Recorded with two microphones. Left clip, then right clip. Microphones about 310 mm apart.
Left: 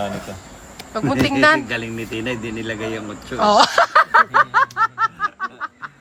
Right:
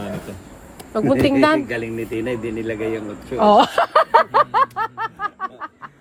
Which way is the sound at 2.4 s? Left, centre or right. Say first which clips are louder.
Right 2 dB; left.